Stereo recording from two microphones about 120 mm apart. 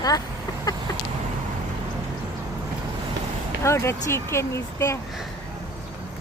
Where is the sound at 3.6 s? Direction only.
25° left (ahead or behind).